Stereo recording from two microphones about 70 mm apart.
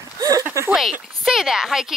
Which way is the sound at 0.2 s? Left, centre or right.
Right.